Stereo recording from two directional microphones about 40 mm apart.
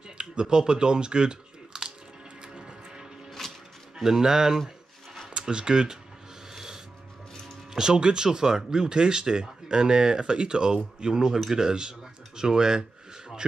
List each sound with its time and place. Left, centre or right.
0.2 s speech: right
2.4 s a sound: right
3.4 s a sound: centre
3.9 s speech: centre
6.5 s music: centre
7.7 s speech: centre